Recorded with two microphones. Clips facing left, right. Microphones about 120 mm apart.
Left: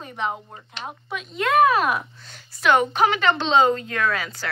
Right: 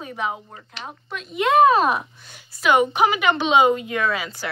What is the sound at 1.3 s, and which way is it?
Speech, 20° right (ahead or behind).